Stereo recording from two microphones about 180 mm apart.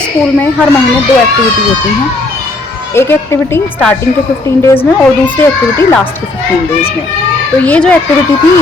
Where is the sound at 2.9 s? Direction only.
15° left (ahead or behind).